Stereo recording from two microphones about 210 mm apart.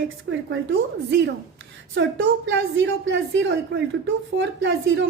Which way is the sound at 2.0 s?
55° right (ahead or behind).